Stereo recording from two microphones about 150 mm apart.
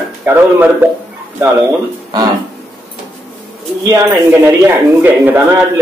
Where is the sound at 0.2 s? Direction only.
15° right (ahead or behind).